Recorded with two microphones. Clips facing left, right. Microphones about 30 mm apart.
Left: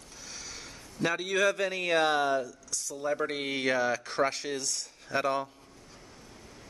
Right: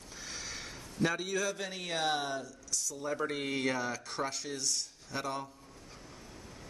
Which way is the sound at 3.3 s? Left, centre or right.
Left.